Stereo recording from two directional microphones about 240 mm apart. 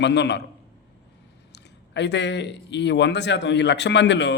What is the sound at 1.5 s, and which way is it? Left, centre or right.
Speech, left.